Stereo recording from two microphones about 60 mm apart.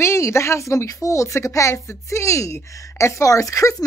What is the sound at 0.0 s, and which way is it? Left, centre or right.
A woman's voice, left.